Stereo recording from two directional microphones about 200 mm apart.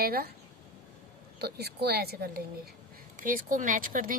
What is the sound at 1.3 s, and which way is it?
A woman's voice, 55° right (ahead or behind).